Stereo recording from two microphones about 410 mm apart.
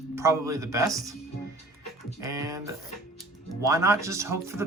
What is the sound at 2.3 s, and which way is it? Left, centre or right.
Speech, centre.